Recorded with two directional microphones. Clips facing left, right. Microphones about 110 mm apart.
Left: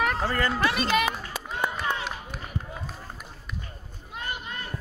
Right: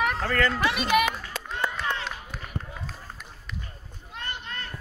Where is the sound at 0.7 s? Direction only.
10° right (ahead or behind).